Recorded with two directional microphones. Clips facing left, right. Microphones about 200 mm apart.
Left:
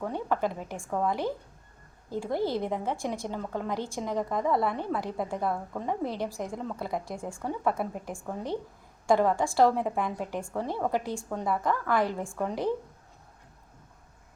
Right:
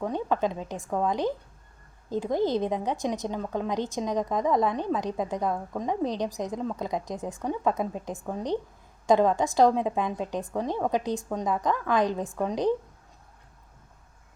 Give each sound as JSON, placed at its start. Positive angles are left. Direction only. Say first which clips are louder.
{"t": 0.0, "sound": "a woman's voice", "louder": "right 2 dB", "side_deg": -20}